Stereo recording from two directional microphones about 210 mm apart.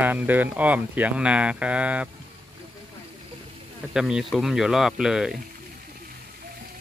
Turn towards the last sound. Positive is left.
turn(degrees=-5)  # may be behind; listen again after turning